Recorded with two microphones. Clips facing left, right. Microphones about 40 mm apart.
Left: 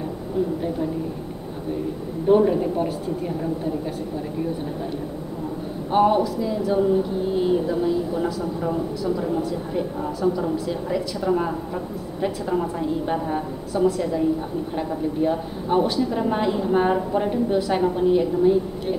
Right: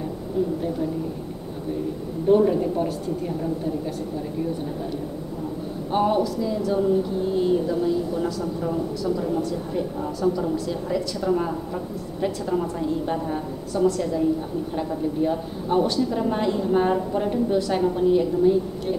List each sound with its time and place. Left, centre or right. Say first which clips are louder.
2.2 s a woman's voice: left 1 dB; centre
5.9 s a woman's voice: left 3 dB; centre